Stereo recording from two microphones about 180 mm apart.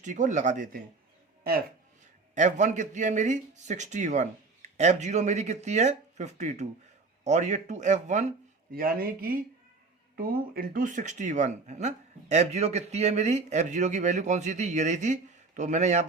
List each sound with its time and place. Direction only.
0.0 s speech: 45° right (ahead or behind)
2.3 s speech: 45° right (ahead or behind)
8.7 s speech: 55° right (ahead or behind)